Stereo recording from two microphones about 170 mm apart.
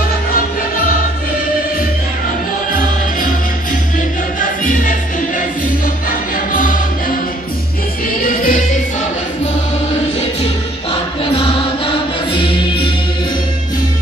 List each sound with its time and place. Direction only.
6.3 s choir: 50° left (ahead or behind)
8.2 s music: 55° left (ahead or behind)
11.3 s music: 30° left (ahead or behind)